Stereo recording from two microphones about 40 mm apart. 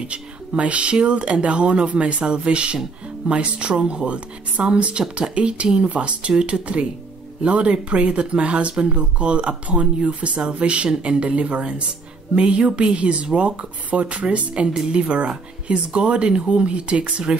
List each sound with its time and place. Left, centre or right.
0.0 s speech: right